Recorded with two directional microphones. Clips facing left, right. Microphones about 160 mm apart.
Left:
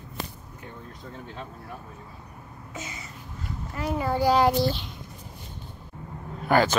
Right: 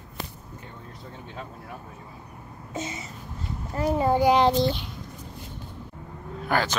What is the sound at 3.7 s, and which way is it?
Child singing, 35° right (ahead or behind).